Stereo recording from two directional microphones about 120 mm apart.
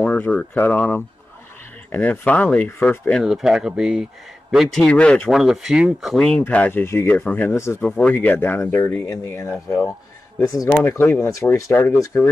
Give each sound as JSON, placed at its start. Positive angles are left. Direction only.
{"t": 0.0, "sound": "speech", "side_deg": 15}
{"t": 3.3, "sound": "speech", "side_deg": -5}
{"t": 4.8, "sound": "speech", "side_deg": 10}
{"t": 5.3, "sound": "speech", "side_deg": -5}
{"t": 7.8, "sound": "speech", "side_deg": 10}